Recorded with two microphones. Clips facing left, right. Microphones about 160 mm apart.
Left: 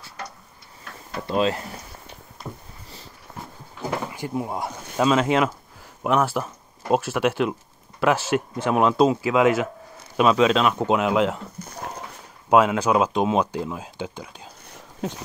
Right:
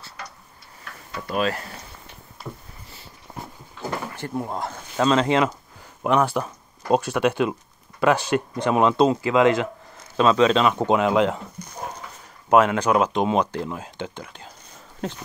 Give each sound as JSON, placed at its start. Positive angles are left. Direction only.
{"t": 1.1, "sound": "speech", "side_deg": 25}
{"t": 2.4, "sound": "a sound", "side_deg": 0}
{"t": 3.9, "sound": "speech", "side_deg": 10}
{"t": 12.4, "sound": "speech", "side_deg": 10}